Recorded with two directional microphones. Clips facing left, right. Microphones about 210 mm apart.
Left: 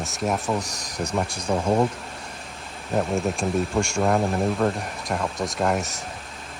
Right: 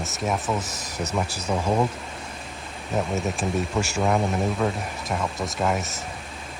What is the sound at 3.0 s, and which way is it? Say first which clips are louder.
Speech: left 2 dB; centre (ahead or behind).